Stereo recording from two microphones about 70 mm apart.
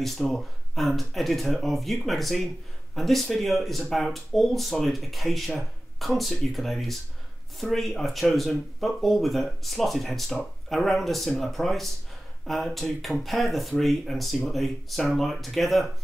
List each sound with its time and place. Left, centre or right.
0.0 s speech: centre